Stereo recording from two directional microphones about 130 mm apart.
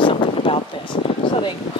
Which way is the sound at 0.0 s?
40° left (ahead or behind).